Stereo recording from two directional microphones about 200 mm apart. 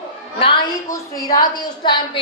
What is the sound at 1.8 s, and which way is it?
Speech, 25° left (ahead or behind).